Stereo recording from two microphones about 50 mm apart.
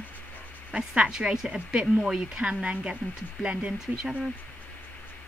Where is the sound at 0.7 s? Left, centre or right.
Right.